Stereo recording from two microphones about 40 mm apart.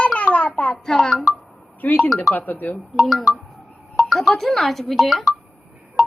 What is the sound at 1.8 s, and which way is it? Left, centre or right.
Speech, left.